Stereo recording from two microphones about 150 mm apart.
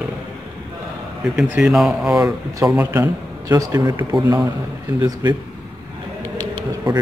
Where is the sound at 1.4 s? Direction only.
5° right (ahead or behind).